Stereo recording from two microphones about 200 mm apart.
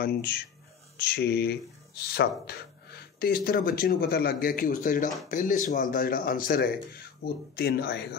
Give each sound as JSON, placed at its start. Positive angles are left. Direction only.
{"t": 0.0, "sound": "speech", "side_deg": 50}